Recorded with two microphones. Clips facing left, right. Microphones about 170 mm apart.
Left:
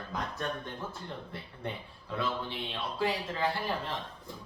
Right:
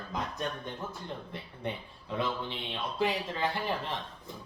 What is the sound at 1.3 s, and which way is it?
A man's voice, 20° right (ahead or behind).